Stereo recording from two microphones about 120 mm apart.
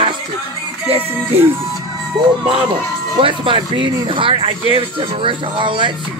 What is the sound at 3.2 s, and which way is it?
Speech, 45° right (ahead or behind).